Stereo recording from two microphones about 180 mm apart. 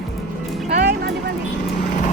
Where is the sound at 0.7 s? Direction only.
65° right (ahead or behind).